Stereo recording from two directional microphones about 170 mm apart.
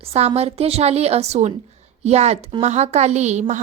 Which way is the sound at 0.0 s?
35° right (ahead or behind).